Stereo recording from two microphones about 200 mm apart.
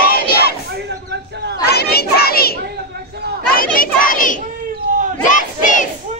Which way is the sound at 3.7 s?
45° left (ahead or behind).